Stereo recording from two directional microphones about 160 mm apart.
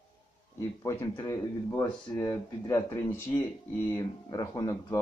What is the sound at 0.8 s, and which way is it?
Speech, 20° left (ahead or behind).